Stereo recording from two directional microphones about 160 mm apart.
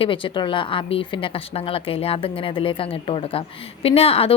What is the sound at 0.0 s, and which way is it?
A woman's voice, 30° left (ahead or behind).